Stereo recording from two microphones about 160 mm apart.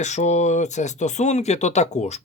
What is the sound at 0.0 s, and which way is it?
Speech, 45° left (ahead or behind).